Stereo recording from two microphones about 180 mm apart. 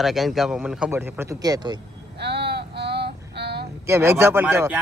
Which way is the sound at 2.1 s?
65° right (ahead or behind).